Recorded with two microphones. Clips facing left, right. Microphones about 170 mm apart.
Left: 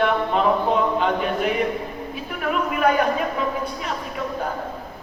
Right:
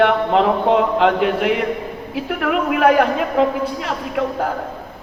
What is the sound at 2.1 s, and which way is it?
A man's voice, 75° right (ahead or behind).